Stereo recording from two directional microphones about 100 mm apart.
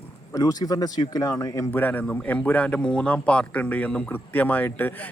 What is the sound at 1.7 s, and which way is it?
A man's voice, 20° left (ahead or behind).